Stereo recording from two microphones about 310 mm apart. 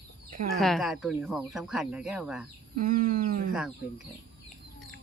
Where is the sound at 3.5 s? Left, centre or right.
Centre.